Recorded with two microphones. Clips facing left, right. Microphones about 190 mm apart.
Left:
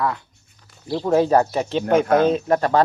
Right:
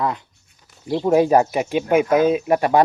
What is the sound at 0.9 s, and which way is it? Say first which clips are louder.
Speech: right 2 dB; 15° right (ahead or behind).